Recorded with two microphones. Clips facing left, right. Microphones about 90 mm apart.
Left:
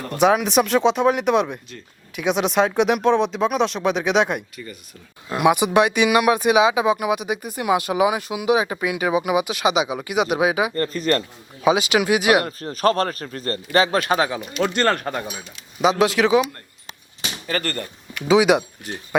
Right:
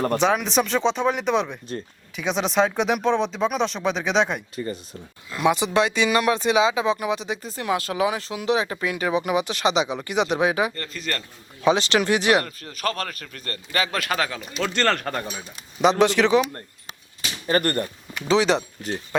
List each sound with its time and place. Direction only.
0.2 s speech: 5° left (ahead or behind)
4.5 s speech: 30° right (ahead or behind)
5.4 s speech: 15° left (ahead or behind)
10.8 s a man's voice: 40° left (ahead or behind)
11.6 s speech: 10° left (ahead or behind)
12.5 s a man's voice: 35° left (ahead or behind); by 16.5 s 5° left (ahead or behind)
17.4 s speech: 20° right (ahead or behind)
18.3 s speech: 10° left (ahead or behind)